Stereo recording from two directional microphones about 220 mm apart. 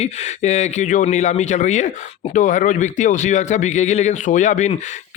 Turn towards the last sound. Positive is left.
turn(degrees=35)  # may be behind; listen again after turning